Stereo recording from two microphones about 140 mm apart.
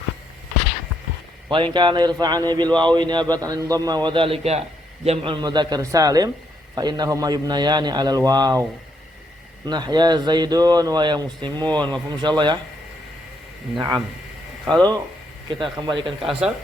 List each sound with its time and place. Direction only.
1.5 s a man's voice: 35° right (ahead or behind)
9.6 s speech: 30° right (ahead or behind)
14.7 s a man's voice: 30° right (ahead or behind)
16.0 s speech: centre (ahead or behind)